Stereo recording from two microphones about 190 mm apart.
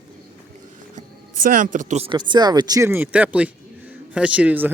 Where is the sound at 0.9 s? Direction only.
45° right (ahead or behind).